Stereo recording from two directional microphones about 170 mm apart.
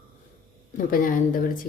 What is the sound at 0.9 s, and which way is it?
Speech, 55° left (ahead or behind).